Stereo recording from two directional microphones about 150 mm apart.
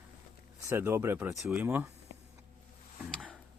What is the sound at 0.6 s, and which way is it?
Speech, 20° right (ahead or behind).